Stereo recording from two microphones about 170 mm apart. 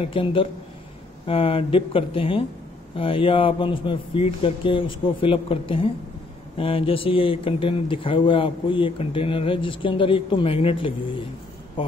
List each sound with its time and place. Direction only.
0.0 s speech: 30° left (ahead or behind)